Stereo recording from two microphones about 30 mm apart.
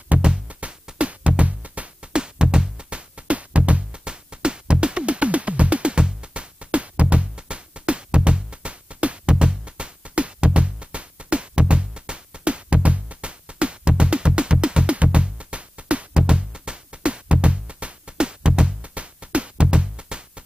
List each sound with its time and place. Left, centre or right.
0.1 s music: right
2.1 s music: right
4.0 s music: right
9.3 s music: right
16.1 s music: right
18.8 s music: right